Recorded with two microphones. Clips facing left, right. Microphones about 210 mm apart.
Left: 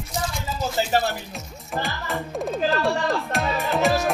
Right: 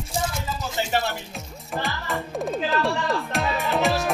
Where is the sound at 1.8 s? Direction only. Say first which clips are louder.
Even; centre (ahead or behind).